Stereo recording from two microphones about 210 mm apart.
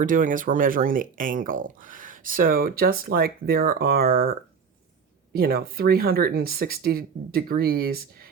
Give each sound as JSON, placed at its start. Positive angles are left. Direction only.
{"t": 0.0, "sound": "speech", "side_deg": -40}